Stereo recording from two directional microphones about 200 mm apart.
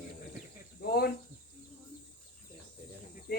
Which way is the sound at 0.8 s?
50° left (ahead or behind).